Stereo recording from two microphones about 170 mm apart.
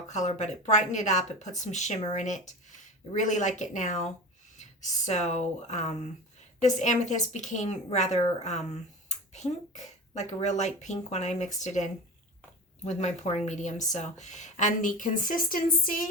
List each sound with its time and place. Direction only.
0.1 s speech: 45° left (ahead or behind)